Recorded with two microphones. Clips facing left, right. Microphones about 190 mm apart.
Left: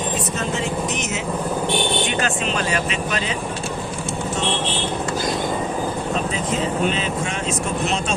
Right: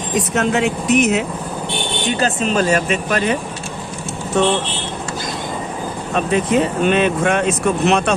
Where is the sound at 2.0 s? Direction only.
35° right (ahead or behind); by 3.3 s 55° right (ahead or behind).